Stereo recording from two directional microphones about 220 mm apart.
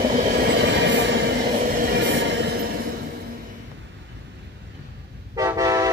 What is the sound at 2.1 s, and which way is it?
Vehicle, 55° right (ahead or behind).